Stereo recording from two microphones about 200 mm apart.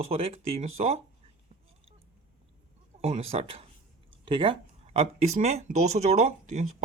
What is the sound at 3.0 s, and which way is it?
Speech, 30° right (ahead or behind).